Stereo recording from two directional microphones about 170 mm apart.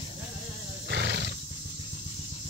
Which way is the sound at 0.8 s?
90° right.